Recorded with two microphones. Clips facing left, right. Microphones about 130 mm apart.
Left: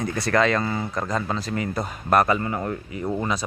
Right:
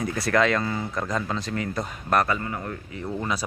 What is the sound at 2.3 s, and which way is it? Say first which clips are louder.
Speech: left 5 dB; 30° left (ahead or behind).